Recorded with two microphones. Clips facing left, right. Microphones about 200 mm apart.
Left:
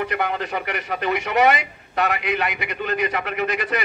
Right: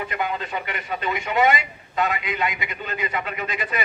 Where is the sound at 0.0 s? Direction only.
70° left (ahead or behind).